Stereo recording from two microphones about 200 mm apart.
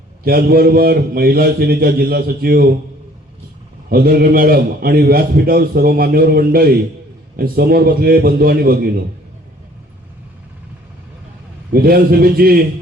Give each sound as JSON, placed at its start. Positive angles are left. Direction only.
{"t": 0.3, "sound": "a man's voice", "side_deg": -50}
{"t": 3.8, "sound": "a man's voice", "side_deg": -50}
{"t": 11.7, "sound": "a man's voice", "side_deg": -50}